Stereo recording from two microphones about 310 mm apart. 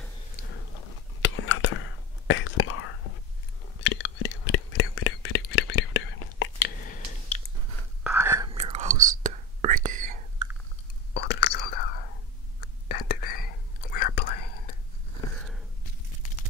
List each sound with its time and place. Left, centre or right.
1.2 s a sound: left
2.2 s whispering: left
8.0 s whispering: centre; by 10.1 s right
11.1 s whispering: left